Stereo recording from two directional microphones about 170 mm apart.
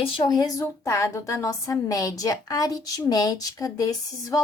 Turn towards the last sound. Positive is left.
turn(degrees=20)  # may be behind; listen again after turning